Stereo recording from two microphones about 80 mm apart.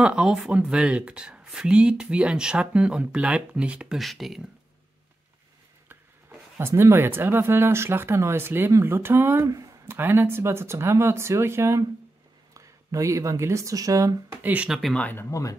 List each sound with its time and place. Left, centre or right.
0.0 s speech: centre
4.0 s speech: centre
5.9 s a sound: right
6.7 s speech: right
9.5 s a sound: right
9.8 s speech: right
14.3 s speech: right
14.7 s speech: centre